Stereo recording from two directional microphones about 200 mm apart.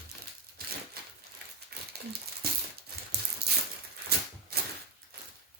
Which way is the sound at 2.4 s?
50° right (ahead or behind).